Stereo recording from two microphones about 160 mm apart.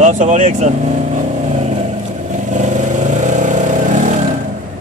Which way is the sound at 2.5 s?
50° right (ahead or behind).